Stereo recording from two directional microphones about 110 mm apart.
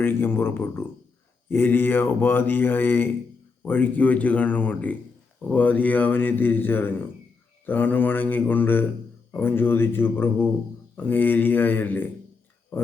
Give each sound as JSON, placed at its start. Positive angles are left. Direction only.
{"t": 0.0, "sound": "speech", "side_deg": 20}